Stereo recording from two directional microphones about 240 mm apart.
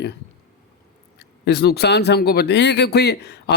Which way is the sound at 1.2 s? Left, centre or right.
Left.